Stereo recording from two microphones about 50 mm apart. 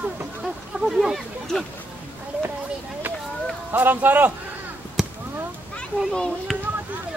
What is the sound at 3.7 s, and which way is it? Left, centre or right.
Speech, right.